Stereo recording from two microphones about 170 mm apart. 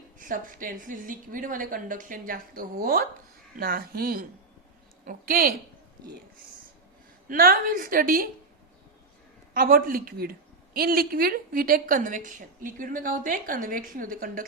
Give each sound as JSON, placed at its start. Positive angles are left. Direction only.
{"t": 0.2, "sound": "a woman's voice", "side_deg": -50}
{"t": 7.3, "sound": "a woman's voice", "side_deg": -55}
{"t": 9.6, "sound": "a woman's voice", "side_deg": -55}